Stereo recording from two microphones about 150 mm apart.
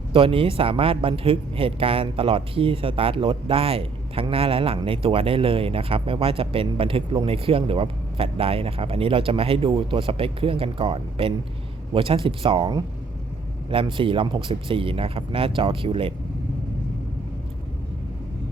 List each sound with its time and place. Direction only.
0.1 s speech: 35° right (ahead or behind)